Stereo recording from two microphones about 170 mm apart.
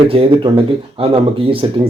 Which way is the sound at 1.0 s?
35° right (ahead or behind).